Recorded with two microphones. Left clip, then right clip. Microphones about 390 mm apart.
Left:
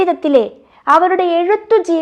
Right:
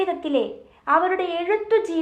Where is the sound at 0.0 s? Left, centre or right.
Left.